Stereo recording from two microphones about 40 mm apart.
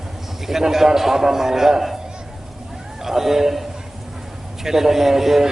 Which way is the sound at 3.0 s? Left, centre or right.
Centre.